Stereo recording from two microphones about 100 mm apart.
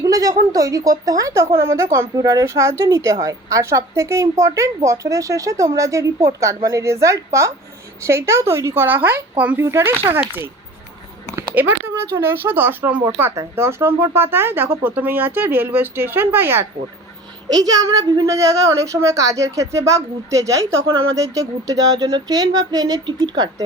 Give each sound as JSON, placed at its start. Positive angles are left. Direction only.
{"t": 0.0, "sound": "speech", "side_deg": -35}
{"t": 11.6, "sound": "speech", "side_deg": -15}
{"t": 17.5, "sound": "speech", "side_deg": -40}